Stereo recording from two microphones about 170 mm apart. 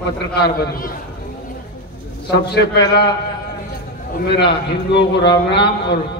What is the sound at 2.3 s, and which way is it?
Speech, 80° left.